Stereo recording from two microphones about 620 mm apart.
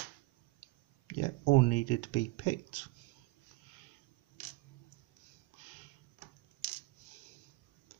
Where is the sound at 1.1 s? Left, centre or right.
Left.